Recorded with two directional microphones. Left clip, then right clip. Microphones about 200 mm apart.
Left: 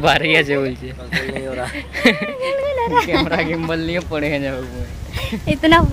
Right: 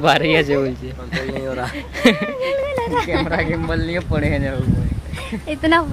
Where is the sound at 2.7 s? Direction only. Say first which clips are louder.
Left 3 dB; 45° left (ahead or behind).